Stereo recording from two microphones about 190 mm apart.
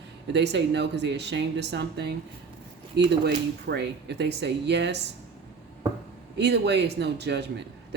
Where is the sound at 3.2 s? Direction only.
55° right (ahead or behind).